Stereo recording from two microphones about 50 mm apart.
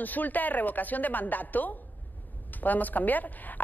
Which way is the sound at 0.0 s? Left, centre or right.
Left.